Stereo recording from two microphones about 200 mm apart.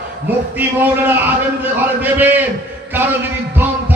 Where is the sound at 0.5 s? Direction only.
10° right (ahead or behind).